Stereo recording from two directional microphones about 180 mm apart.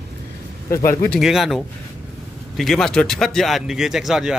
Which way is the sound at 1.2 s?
Centre (ahead or behind).